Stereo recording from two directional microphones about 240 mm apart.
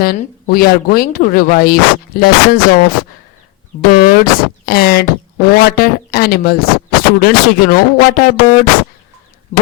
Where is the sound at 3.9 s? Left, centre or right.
Left.